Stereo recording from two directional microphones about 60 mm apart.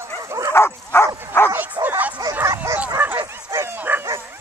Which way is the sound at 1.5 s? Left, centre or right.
Right.